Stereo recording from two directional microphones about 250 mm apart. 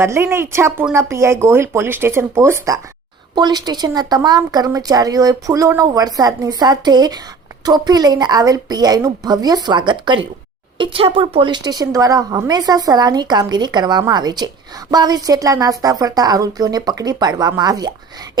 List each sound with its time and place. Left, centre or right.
0.0 s a woman's voice: centre